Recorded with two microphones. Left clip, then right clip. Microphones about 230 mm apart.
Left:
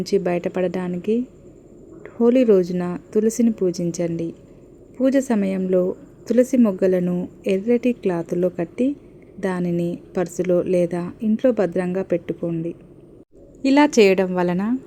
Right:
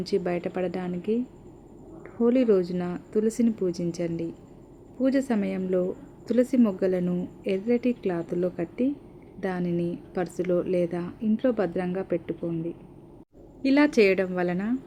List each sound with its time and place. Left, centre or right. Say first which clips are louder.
0.0 s a woman's voice: left 6 dB; centre